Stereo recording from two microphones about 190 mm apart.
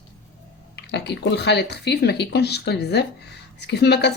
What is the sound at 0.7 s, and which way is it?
Speech, 65° left (ahead or behind).